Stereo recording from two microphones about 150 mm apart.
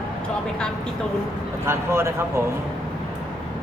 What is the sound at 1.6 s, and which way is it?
Speech, 15° right (ahead or behind).